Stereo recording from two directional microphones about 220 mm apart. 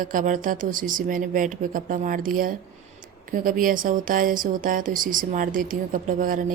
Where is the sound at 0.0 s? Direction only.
40° right (ahead or behind).